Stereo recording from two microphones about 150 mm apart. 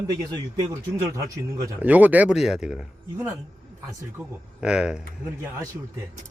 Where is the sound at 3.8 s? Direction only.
5° right (ahead or behind).